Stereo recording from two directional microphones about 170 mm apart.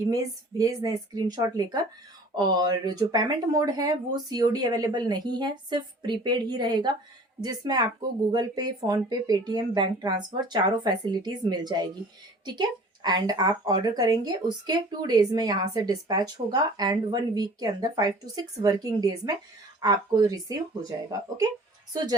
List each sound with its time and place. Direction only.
0.6 s speech: 25° right (ahead or behind)